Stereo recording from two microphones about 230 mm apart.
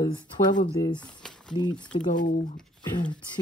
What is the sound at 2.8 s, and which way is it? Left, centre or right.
Speech, centre.